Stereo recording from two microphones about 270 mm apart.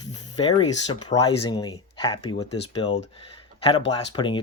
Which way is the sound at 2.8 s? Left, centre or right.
Left.